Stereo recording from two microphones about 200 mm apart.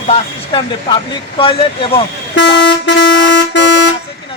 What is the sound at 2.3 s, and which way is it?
Vehicle, 60° left (ahead or behind).